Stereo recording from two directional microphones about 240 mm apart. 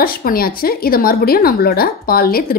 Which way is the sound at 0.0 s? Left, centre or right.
Left.